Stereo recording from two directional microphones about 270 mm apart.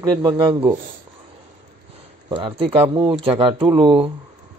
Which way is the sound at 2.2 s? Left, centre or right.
Centre.